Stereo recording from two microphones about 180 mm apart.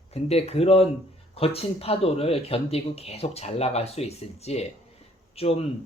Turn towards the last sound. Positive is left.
turn(degrees=35)  # may be behind; listen again after turning